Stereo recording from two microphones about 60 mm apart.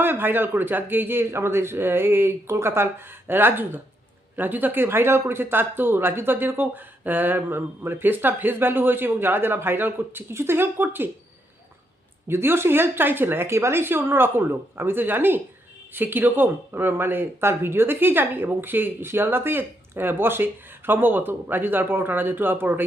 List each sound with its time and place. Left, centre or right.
0.0 s speech: right
12.3 s speech: right